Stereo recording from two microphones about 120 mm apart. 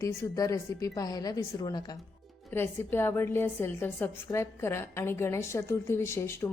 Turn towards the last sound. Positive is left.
turn(degrees=25)  # may be behind; listen again after turning